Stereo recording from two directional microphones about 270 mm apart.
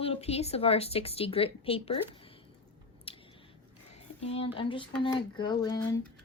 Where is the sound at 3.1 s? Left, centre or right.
Centre.